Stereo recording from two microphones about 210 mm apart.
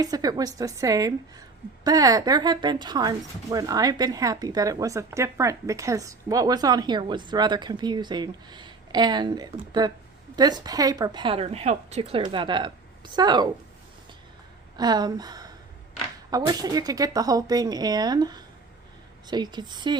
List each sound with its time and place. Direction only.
0.0 s a woman's voice: 15° right (ahead or behind)
14.8 s a woman's voice: 20° right (ahead or behind)